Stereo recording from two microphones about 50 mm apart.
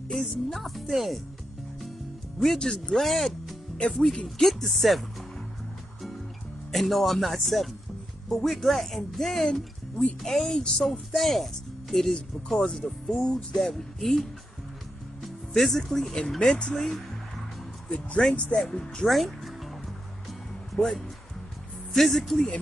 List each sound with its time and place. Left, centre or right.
0.1 s speech: centre
2.4 s speech: centre
6.7 s a woman's voice: centre
15.2 s a woman's voice: centre
17.8 s a woman's voice: centre
19.0 s speech: centre
20.7 s speech: centre